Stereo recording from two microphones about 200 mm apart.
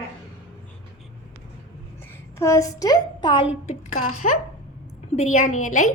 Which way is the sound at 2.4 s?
15° left (ahead or behind).